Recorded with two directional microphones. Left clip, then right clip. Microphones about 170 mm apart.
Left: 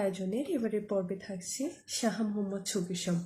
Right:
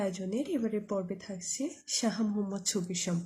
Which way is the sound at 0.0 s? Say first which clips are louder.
Left 1 dB; 25° right (ahead or behind).